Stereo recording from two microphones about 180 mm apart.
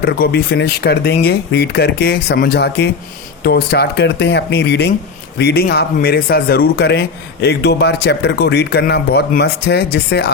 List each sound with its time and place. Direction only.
0.0 s speech: 60° left (ahead or behind)